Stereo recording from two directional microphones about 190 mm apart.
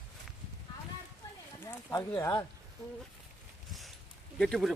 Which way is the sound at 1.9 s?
15° left (ahead or behind).